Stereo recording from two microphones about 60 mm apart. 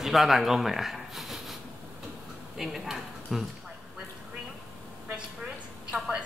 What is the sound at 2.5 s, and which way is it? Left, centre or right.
Speech, centre.